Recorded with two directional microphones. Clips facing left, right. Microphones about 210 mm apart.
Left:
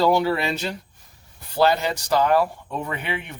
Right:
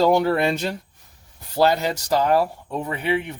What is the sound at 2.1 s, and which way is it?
Speech, 35° right (ahead or behind).